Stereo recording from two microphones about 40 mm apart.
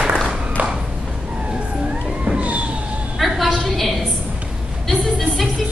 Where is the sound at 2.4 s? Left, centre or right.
Right.